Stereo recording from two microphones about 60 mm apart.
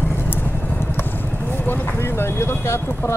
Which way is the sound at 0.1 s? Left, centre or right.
Left.